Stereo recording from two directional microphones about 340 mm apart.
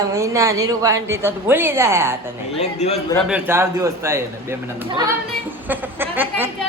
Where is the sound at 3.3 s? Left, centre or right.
Centre.